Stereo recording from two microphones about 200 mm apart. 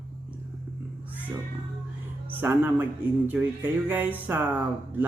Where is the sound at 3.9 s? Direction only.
10° right (ahead or behind).